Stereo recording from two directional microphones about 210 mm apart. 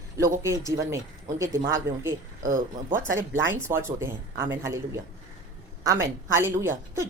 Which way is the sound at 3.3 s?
10° right (ahead or behind).